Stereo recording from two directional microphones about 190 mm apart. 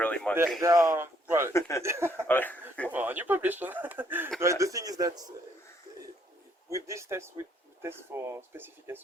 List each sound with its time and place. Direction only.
0.0 s a sound: 5° left (ahead or behind)
0.6 s speech: 15° right (ahead or behind)
1.5 s speech: 15° left (ahead or behind)
1.8 s speech: 15° right (ahead or behind)
2.2 s speech: 10° left (ahead or behind)
2.9 s speech: 10° right (ahead or behind)
6.7 s speech: 15° right (ahead or behind)